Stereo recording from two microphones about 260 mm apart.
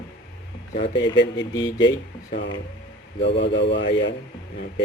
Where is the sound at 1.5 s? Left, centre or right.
Centre.